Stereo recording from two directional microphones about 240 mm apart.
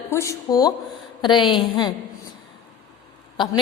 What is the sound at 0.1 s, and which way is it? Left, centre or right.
A woman's voice, centre.